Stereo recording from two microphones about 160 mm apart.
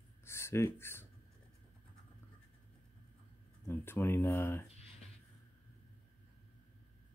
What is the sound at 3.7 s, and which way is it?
Speech, 15° left (ahead or behind).